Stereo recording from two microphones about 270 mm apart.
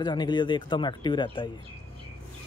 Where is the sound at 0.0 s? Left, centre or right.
Centre.